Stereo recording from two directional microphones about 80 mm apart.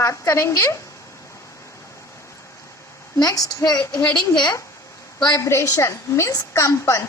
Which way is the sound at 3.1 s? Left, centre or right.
Left.